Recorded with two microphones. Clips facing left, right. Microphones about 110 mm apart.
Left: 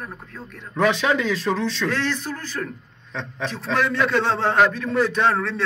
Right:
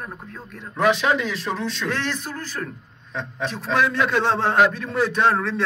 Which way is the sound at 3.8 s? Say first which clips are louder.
Left 1 dB; 25° right (ahead or behind).